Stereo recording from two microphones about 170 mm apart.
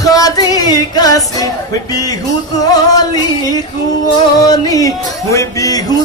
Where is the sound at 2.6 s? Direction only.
20° left (ahead or behind).